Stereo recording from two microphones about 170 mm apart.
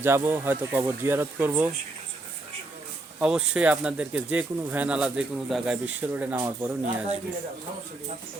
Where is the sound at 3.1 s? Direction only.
5° right (ahead or behind).